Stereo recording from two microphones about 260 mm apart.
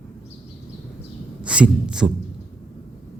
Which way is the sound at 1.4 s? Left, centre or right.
Centre.